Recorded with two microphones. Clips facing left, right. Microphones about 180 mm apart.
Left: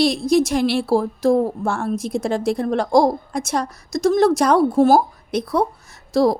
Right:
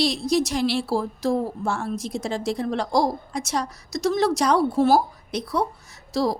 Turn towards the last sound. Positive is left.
turn(degrees=55)  # may be behind; listen again after turning